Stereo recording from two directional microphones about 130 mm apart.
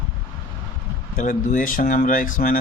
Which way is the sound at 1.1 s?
75° left (ahead or behind).